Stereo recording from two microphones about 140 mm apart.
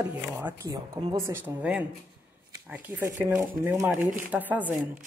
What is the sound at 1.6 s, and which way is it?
Speech, 10° right (ahead or behind).